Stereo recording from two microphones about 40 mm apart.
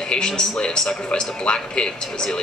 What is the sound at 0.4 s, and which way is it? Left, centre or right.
A man's voice, centre.